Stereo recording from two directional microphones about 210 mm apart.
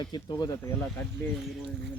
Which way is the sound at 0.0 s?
20° left (ahead or behind).